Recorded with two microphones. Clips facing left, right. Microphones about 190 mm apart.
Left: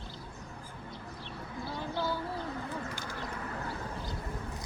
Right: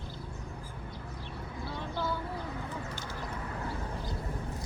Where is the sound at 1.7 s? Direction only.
5° left (ahead or behind).